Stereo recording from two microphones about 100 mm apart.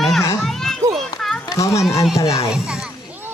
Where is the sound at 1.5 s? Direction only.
30° left (ahead or behind).